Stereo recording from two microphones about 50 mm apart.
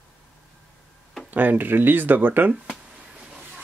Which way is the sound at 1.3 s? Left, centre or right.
Right.